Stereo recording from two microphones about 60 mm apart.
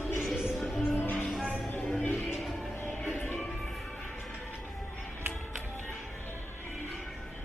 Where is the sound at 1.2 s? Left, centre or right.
Centre.